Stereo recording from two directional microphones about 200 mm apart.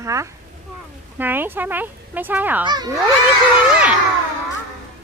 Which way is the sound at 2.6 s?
20° right (ahead or behind).